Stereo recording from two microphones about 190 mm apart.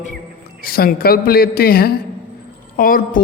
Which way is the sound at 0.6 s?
50° left (ahead or behind).